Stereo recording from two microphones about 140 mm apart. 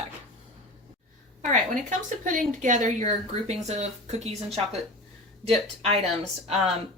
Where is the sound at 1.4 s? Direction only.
60° right (ahead or behind).